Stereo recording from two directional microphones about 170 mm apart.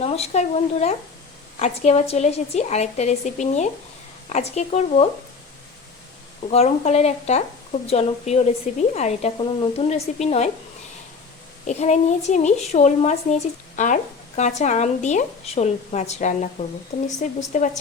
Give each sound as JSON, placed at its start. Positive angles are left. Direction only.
{"t": 0.0, "sound": "speech", "side_deg": 35}
{"t": 6.5, "sound": "speech", "side_deg": 40}
{"t": 11.6, "sound": "speech", "side_deg": 40}